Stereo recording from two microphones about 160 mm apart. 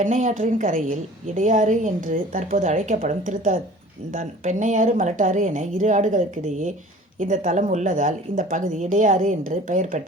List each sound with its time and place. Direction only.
0.0 s a woman's voice: 50° right (ahead or behind)